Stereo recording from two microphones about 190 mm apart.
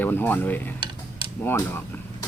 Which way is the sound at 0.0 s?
10° left (ahead or behind).